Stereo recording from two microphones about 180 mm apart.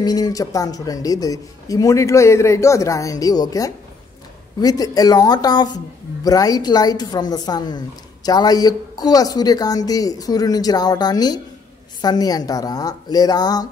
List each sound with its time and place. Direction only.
0.0 s a woman's voice: 20° left (ahead or behind)